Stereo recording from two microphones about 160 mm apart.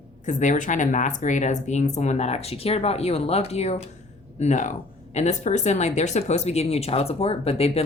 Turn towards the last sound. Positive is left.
turn(degrees=40)  # may be behind; listen again after turning